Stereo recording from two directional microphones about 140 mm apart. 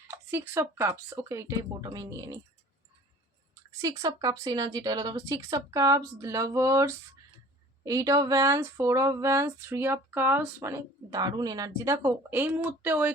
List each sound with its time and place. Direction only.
0.1 s speech: 15° right (ahead or behind)
3.8 s speech: 25° right (ahead or behind)
12.0 s speech: 15° right (ahead or behind)